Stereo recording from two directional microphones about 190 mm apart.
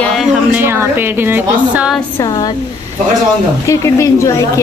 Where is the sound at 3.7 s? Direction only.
15° left (ahead or behind).